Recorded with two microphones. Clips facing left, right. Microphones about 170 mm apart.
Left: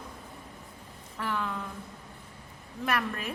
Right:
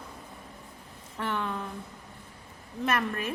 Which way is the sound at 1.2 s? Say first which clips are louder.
Right 1 dB; 25° right (ahead or behind).